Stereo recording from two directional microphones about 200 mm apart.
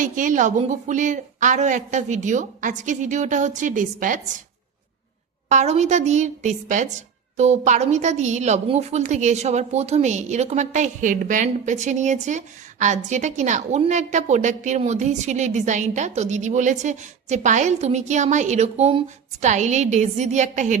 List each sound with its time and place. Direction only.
0.0 s a woman's voice: 40° right (ahead or behind)
5.5 s a woman's voice: 35° right (ahead or behind)